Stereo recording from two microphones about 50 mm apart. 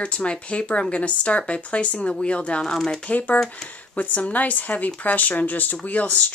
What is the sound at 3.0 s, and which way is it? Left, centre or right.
Speech, left.